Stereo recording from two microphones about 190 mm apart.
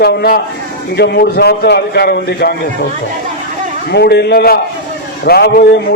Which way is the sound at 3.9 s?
60° left (ahead or behind).